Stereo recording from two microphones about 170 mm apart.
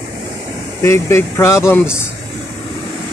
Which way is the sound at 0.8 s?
15° left (ahead or behind).